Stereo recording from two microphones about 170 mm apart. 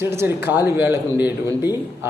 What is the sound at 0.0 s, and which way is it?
A man's voice, 15° right (ahead or behind).